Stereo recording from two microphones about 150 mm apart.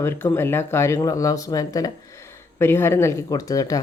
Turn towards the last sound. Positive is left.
turn(degrees=25)  # may be behind; listen again after turning